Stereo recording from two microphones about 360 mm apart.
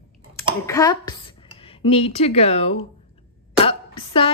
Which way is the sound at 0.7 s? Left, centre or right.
Centre.